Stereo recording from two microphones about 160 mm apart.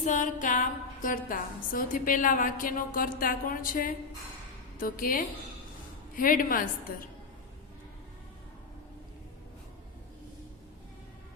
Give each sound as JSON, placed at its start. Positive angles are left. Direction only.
{"t": 0.0, "sound": "a woman's voice", "side_deg": 50}